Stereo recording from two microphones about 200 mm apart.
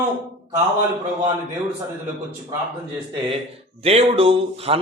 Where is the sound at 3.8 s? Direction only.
30° right (ahead or behind).